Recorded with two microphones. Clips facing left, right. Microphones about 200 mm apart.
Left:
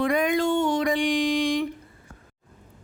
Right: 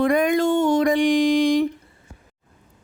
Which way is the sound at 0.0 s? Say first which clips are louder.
Right 4 dB; 45° right (ahead or behind).